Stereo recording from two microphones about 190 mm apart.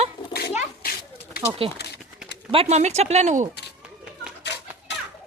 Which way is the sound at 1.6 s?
30° right (ahead or behind).